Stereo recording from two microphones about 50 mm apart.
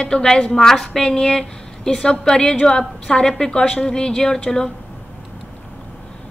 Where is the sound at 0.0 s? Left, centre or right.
Centre.